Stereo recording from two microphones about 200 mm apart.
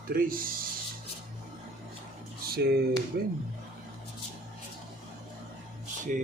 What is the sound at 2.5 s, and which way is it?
Speech, 50° right (ahead or behind).